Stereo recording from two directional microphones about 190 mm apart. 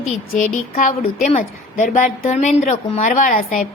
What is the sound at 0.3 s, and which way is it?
A woman's voice, 45° left (ahead or behind).